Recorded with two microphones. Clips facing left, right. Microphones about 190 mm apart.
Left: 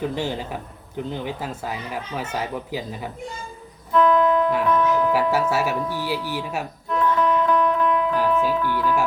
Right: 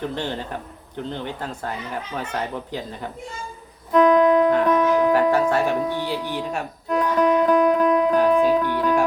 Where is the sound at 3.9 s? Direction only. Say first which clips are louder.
Right 3 dB; 45° right (ahead or behind).